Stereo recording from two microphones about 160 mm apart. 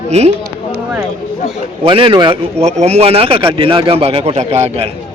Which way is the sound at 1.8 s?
30° right (ahead or behind).